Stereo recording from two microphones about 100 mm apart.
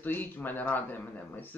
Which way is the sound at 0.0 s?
20° left (ahead or behind).